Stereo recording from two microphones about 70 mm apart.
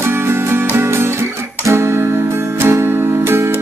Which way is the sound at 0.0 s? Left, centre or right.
Right.